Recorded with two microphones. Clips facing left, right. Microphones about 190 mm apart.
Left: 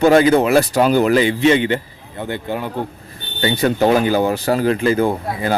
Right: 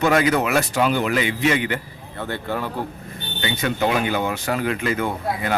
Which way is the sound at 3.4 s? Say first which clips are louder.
Left 7 dB; 35° left (ahead or behind).